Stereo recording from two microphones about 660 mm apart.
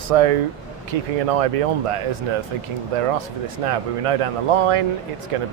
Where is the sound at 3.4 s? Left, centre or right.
Right.